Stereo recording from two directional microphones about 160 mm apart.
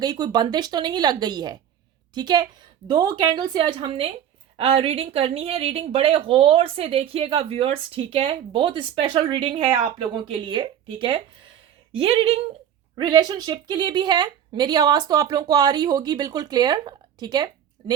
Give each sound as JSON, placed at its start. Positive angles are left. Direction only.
{"t": 0.0, "sound": "a woman's voice", "side_deg": -25}